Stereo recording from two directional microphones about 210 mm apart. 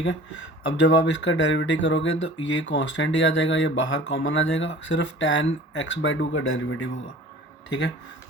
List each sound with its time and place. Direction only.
0.0 s speech: 65° left (ahead or behind)